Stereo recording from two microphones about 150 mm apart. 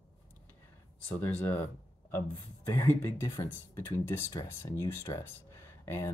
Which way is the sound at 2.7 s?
15° left (ahead or behind).